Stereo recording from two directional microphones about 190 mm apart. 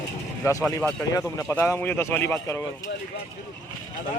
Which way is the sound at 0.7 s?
15° left (ahead or behind).